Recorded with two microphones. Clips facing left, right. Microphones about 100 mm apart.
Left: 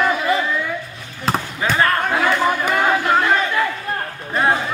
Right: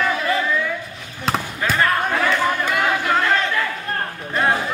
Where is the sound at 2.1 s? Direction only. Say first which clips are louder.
Left 2 dB; 15° left (ahead or behind).